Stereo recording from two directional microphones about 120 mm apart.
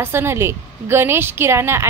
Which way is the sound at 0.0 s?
20° right (ahead or behind).